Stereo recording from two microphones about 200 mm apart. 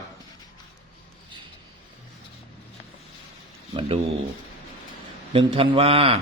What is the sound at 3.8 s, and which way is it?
Speech, 25° right (ahead or behind).